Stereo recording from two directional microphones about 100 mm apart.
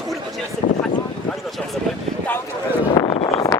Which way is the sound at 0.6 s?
90° left.